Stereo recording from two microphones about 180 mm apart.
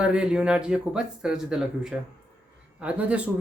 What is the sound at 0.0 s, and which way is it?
Speech, 5° right (ahead or behind).